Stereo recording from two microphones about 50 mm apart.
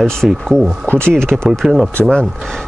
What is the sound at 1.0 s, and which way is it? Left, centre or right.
Speech, centre.